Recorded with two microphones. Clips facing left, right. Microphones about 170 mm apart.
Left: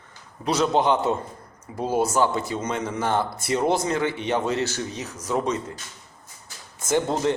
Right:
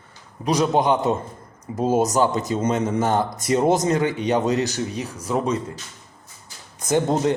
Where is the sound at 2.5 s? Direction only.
30° right (ahead or behind).